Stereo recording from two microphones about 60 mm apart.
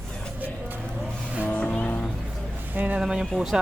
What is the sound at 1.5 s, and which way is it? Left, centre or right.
Music, left.